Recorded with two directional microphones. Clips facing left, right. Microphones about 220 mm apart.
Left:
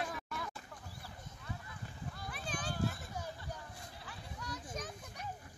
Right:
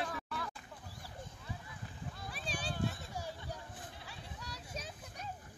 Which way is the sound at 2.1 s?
Centre (ahead or behind).